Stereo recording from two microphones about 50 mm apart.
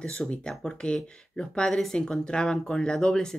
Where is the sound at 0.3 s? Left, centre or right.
Centre.